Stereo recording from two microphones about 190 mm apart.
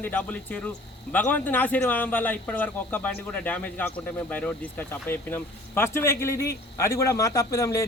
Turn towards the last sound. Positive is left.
turn(degrees=15)  # may be behind; listen again after turning